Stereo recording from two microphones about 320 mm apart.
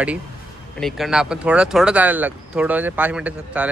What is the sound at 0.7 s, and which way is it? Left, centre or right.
Speech, centre.